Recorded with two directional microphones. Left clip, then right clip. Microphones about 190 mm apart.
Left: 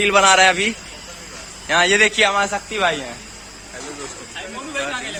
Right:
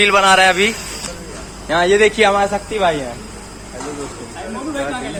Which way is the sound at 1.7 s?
15° left (ahead or behind).